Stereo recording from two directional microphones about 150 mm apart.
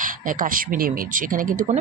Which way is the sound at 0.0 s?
65° right (ahead or behind).